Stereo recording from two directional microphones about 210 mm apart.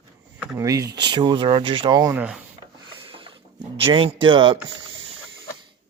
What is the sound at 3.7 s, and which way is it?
Speech, 25° right (ahead or behind).